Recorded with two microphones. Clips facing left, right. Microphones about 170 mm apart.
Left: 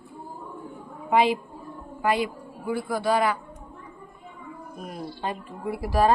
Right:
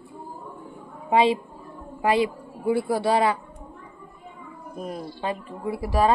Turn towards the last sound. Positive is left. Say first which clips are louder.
# right 1 dB
turn(degrees=-25)  # may be behind; listen again after turning